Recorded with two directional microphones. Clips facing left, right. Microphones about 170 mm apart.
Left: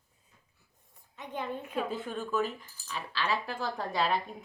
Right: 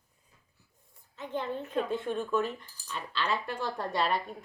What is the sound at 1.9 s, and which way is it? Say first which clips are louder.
Speech: right 3 dB; centre (ahead or behind).